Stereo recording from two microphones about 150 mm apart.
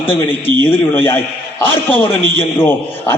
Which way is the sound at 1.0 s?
15° left (ahead or behind).